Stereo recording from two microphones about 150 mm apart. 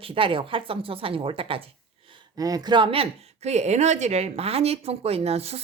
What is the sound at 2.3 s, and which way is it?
Speech, 25° right (ahead or behind).